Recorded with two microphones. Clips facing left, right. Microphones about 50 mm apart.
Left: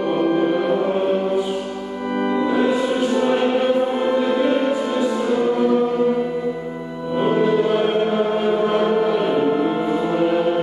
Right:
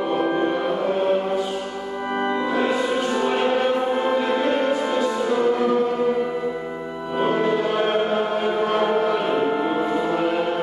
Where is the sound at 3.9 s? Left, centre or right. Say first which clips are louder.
Left 2 dB; centre.